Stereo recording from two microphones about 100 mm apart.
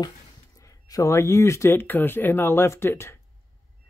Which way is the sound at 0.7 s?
35° left (ahead or behind).